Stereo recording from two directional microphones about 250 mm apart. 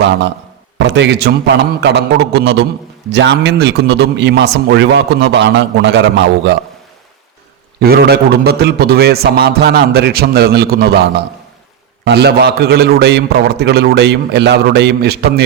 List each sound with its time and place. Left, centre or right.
0.8 s a man's voice: right
7.8 s a man's voice: right
12.0 s a man's voice: right